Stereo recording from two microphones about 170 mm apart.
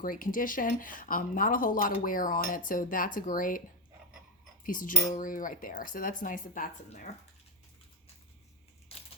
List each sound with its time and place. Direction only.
0.0 s speech: 55° left (ahead or behind)
4.6 s speech: 50° left (ahead or behind)